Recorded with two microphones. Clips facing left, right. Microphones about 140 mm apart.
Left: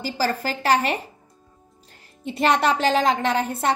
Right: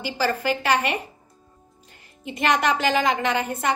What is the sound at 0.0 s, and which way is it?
Speech, 40° left (ahead or behind).